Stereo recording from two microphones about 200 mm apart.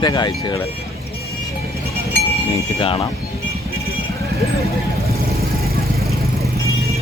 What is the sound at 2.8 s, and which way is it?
Speech, 25° left (ahead or behind).